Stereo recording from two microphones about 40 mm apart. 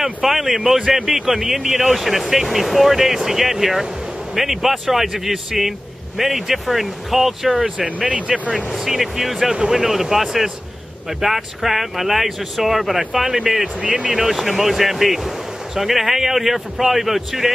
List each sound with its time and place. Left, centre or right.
0.0 s a man's voice: centre
8.1 s speech: right
8.7 s a man's voice: centre
13.7 s speech: right
14.1 s speech: centre